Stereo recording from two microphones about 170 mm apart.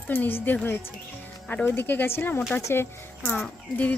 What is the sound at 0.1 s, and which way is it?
Speech, 10° left (ahead or behind).